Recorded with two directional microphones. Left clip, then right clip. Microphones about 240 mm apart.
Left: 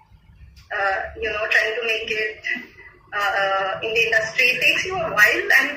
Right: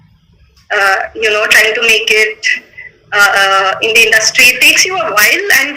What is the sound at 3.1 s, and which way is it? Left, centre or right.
Speech, right.